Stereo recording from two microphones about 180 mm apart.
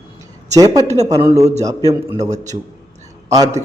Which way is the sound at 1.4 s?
35° right (ahead or behind).